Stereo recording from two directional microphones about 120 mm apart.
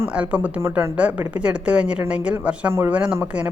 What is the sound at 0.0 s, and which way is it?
A woman's voice, 10° right (ahead or behind).